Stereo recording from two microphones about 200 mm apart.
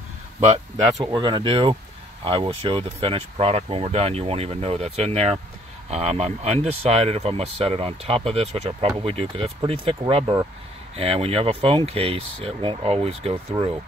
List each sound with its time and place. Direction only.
1.0 s speech: 20° right (ahead or behind)